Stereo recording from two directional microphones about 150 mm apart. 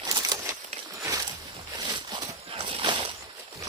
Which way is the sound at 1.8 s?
30° right (ahead or behind).